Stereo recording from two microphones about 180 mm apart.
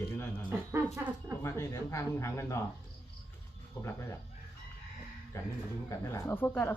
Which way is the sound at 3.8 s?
15° left (ahead or behind).